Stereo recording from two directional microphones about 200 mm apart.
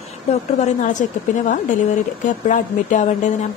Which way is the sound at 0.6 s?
40° left (ahead or behind).